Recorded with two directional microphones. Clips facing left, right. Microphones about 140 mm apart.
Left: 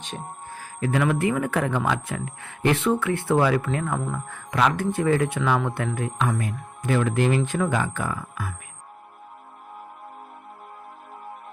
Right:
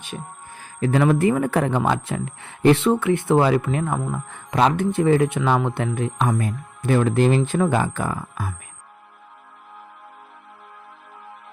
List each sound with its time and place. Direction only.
0.5 s speech: 25° right (ahead or behind)
0.9 s speech: 35° right (ahead or behind)